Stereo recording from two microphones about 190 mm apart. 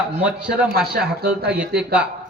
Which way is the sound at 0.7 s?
55° right (ahead or behind).